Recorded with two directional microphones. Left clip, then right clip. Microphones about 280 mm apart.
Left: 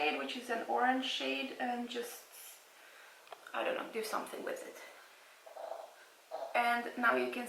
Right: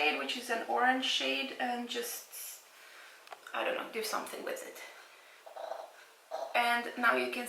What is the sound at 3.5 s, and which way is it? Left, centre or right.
Speech, centre.